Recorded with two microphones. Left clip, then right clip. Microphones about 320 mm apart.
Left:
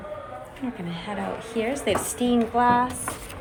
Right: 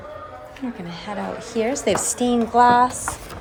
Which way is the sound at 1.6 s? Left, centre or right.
Centre.